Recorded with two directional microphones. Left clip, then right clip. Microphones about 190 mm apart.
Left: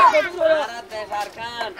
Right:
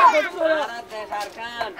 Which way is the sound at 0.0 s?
5° left (ahead or behind).